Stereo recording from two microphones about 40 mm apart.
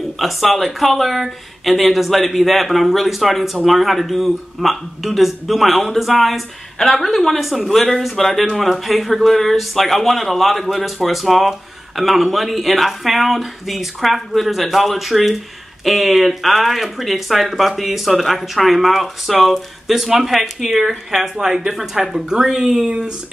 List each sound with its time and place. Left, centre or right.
0.2 s speech: centre
22.8 s speech: right